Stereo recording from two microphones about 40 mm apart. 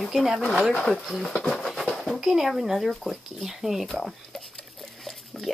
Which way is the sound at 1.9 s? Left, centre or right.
Centre.